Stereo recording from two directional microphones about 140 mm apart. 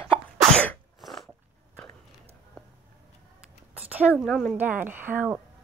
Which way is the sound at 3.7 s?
10° right (ahead or behind).